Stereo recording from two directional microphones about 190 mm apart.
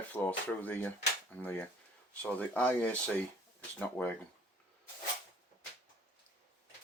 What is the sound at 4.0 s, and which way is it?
Speech, 10° left (ahead or behind).